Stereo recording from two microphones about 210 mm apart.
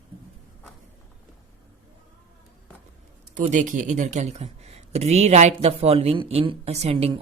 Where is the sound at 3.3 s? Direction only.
35° right (ahead or behind).